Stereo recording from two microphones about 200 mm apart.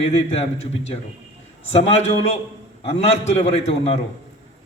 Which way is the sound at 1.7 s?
30° left (ahead or behind).